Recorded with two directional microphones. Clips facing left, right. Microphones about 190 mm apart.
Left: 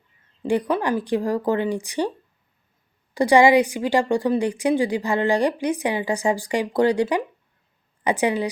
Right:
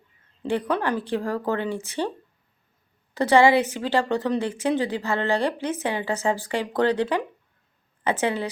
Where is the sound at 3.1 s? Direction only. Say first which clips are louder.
Left 2 dB; 15° left (ahead or behind).